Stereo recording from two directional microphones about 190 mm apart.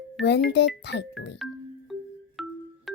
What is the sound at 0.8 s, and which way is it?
Speech, 65° left (ahead or behind).